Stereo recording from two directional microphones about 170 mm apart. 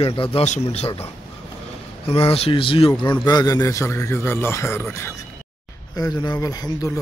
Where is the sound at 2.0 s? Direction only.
35° left (ahead or behind).